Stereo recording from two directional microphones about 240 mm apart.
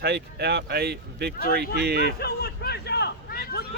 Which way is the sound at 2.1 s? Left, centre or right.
Left.